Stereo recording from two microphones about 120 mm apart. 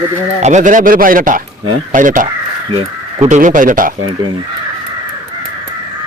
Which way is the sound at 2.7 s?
55° right (ahead or behind).